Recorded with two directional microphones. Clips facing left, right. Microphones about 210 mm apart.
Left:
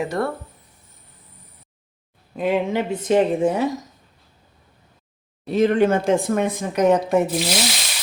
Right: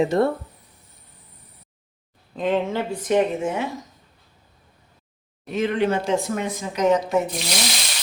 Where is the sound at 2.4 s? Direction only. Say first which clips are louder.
Left 2 dB; 10° left (ahead or behind); by 3.6 s 35° left (ahead or behind).